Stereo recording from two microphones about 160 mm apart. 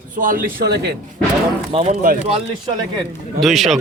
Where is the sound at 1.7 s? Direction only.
45° right (ahead or behind).